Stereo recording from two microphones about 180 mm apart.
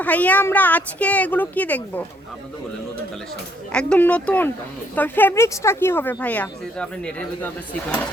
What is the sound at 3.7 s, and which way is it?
A woman's voice, 5° left (ahead or behind).